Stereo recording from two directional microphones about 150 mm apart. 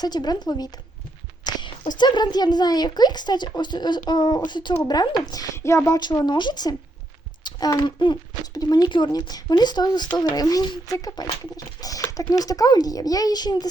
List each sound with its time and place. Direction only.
0.0 s speech: 25° left (ahead or behind)
1.5 s a sound: 30° left (ahead or behind)
2.0 s speech: 30° left (ahead or behind)